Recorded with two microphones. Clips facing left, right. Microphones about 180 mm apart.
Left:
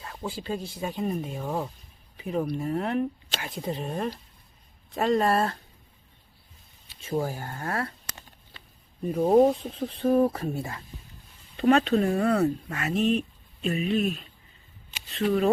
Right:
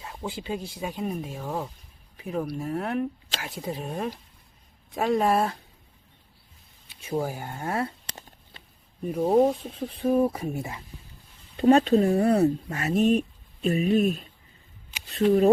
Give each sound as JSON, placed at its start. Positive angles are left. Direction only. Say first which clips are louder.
{"t": 0.0, "sound": "speech", "louder": "even", "side_deg": -15}
{"t": 7.0, "sound": "speech", "louder": "even", "side_deg": -10}
{"t": 9.0, "sound": "speech", "louder": "left 1 dB", "side_deg": -10}
{"t": 9.2, "sound": "speech", "louder": "left 1 dB", "side_deg": 5}
{"t": 11.5, "sound": "speech", "louder": "right 3 dB", "side_deg": -30}
{"t": 11.9, "sound": "speech", "louder": "right 3 dB", "side_deg": -20}
{"t": 12.7, "sound": "speech", "louder": "right 2 dB", "side_deg": -35}
{"t": 13.0, "sound": "speech", "louder": "right 3 dB", "side_deg": -45}